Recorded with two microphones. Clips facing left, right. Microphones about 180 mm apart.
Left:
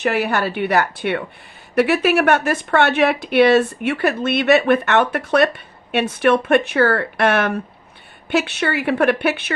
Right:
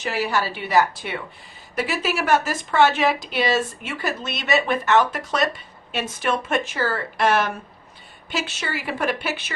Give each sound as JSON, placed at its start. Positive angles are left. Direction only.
{"t": 0.0, "sound": "speech", "side_deg": 60}